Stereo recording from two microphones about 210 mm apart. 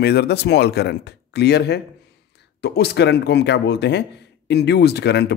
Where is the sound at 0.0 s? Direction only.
50° left (ahead or behind).